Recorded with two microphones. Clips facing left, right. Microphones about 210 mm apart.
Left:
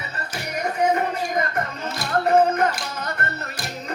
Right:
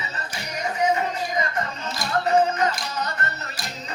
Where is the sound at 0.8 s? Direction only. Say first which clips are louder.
Left 2 dB; 55° left (ahead or behind).